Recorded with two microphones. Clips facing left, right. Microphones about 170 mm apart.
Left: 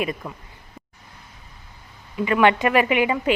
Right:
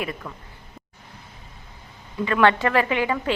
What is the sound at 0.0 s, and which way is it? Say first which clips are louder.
Speech: left 4 dB; 20° left (ahead or behind).